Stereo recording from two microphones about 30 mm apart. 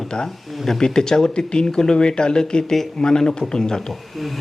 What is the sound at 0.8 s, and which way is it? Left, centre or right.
Speech, left.